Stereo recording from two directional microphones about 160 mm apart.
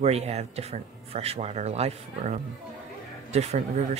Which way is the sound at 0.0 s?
40° right (ahead or behind).